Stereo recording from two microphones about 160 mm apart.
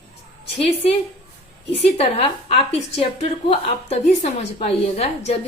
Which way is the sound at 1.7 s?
40° left (ahead or behind).